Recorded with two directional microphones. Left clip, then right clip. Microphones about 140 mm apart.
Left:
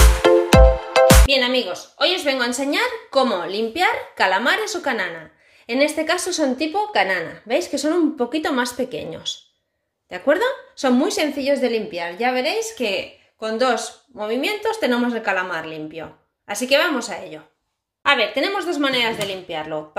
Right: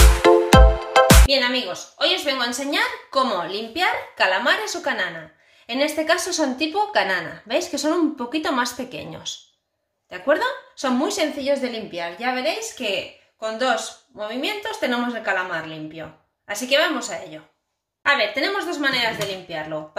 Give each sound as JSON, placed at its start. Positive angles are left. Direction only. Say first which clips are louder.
{"t": 0.0, "sound": "music", "louder": "even", "side_deg": 0}
{"t": 1.6, "sound": "a woman's voice", "louder": "left 2 dB", "side_deg": 45}
{"t": 10.0, "sound": "a woman's voice", "louder": "left 2 dB", "side_deg": 40}
{"t": 18.0, "sound": "a woman's voice", "louder": "left 2 dB", "side_deg": 35}